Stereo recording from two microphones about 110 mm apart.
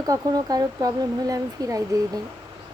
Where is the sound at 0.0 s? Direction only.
35° right (ahead or behind).